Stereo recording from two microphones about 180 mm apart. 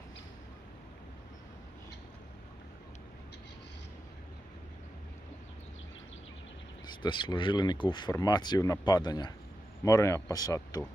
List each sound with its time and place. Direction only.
7.0 s speech: 25° left (ahead or behind)